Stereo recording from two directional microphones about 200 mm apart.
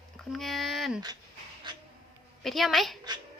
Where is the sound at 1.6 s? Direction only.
20° right (ahead or behind).